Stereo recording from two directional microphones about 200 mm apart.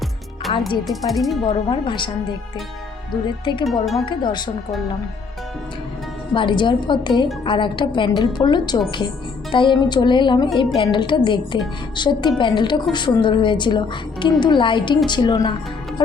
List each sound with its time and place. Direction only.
0.5 s a woman's voice: 30° left (ahead or behind)
0.9 s speech: centre (ahead or behind)
1.5 s a woman's voice: 25° left (ahead or behind)
3.1 s a woman's voice: 25° left (ahead or behind)
3.7 s speech: centre (ahead or behind)
4.0 s a woman's voice: 25° left (ahead or behind)
6.3 s a woman's voice: 25° left (ahead or behind)